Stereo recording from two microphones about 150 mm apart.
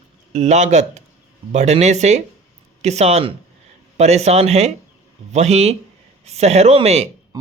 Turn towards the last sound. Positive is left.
turn(degrees=-45)  # may be behind; listen again after turning